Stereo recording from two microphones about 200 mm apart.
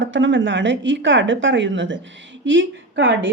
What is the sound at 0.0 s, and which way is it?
A man's voice, 70° right (ahead or behind).